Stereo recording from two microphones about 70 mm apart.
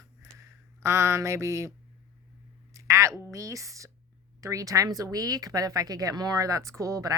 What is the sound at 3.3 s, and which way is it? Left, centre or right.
Speech, right.